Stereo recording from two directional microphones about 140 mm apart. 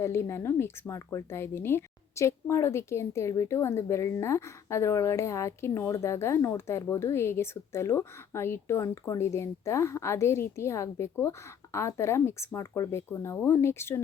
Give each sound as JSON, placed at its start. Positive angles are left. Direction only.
{"t": 0.0, "sound": "speech", "side_deg": 20}